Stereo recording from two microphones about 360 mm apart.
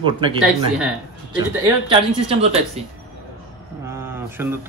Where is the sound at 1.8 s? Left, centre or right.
Centre.